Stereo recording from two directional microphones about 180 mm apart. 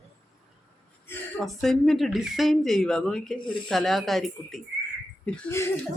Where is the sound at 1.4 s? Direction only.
Centre (ahead or behind).